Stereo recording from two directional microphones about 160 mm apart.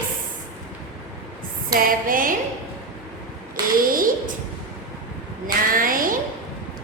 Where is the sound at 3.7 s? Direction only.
60° right (ahead or behind).